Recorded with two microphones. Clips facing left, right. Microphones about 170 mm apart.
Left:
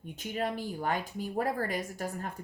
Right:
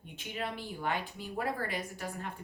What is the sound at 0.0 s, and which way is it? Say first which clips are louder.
Speech: left 5 dB; 45° left (ahead or behind).